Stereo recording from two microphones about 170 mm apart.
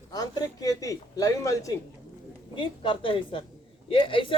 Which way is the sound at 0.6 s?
20° left (ahead or behind).